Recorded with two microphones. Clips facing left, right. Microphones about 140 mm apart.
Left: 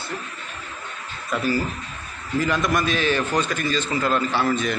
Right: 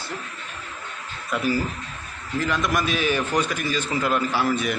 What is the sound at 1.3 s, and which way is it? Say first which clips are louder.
A man's voice: left 1 dB; 10° right (ahead or behind).